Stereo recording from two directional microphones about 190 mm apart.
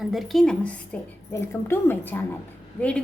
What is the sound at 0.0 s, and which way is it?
Speech, centre (ahead or behind).